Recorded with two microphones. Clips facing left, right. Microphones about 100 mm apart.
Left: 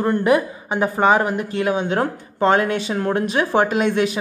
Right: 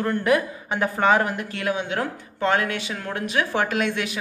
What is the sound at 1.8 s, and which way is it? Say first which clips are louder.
A man's voice: left 6 dB; 35° left (ahead or behind).